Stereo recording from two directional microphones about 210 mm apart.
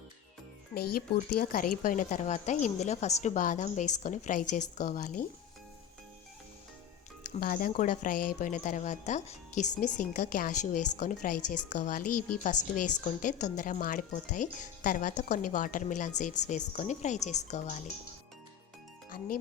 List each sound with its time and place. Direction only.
0.7 s a woman's voice: 45° left (ahead or behind)
7.3 s a woman's voice: 40° left (ahead or behind)